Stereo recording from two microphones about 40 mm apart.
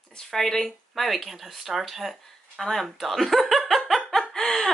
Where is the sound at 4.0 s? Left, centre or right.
Centre.